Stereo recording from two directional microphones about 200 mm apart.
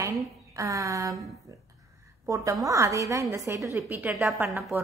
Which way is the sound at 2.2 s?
15° right (ahead or behind).